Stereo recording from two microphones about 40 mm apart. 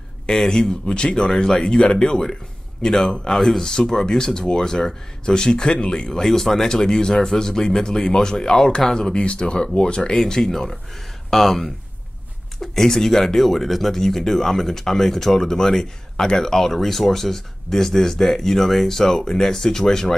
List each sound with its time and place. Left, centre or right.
0.3 s speech: centre